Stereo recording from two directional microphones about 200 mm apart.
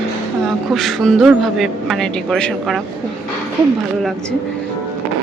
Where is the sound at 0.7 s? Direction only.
Centre (ahead or behind).